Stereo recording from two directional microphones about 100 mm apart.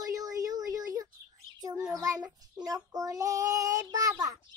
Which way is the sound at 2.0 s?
35° right (ahead or behind).